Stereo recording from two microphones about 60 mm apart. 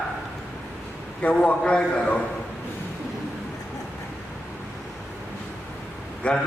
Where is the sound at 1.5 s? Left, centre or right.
Centre.